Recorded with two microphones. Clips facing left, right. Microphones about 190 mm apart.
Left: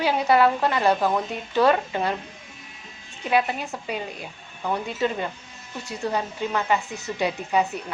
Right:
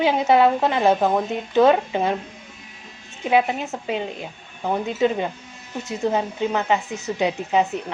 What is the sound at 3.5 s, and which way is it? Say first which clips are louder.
Speech: right 4 dB; 20° right (ahead or behind).